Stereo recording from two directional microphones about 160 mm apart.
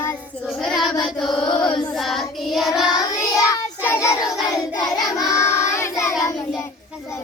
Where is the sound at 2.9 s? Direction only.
20° left (ahead or behind).